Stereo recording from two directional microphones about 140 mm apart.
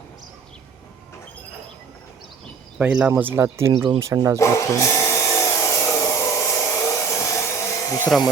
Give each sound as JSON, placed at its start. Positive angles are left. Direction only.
{"t": 2.7, "sound": "speech", "side_deg": -10}
{"t": 4.4, "sound": "wood", "side_deg": 20}